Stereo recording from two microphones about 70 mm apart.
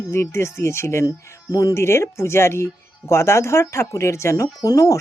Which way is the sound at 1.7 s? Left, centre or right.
Left.